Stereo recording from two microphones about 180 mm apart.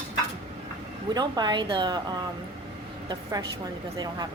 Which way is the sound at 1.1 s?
25° right (ahead or behind).